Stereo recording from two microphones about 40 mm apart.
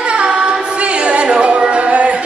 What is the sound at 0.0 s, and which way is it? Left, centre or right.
Music, right.